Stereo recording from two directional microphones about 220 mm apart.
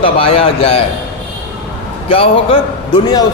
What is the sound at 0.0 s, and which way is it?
Speech, 25° left (ahead or behind).